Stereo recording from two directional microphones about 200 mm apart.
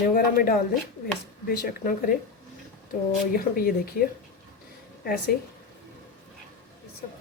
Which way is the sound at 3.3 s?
45° left (ahead or behind).